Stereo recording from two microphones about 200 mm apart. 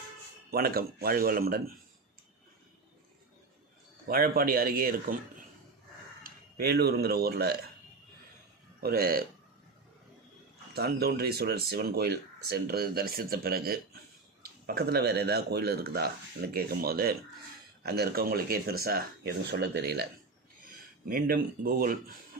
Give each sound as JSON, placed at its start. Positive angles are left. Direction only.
{"t": 0.5, "sound": "speech", "side_deg": -50}
{"t": 4.1, "sound": "speech", "side_deg": -50}
{"t": 6.2, "sound": "speech", "side_deg": -50}
{"t": 8.8, "sound": "speech", "side_deg": -50}
{"t": 10.8, "sound": "speech", "side_deg": -50}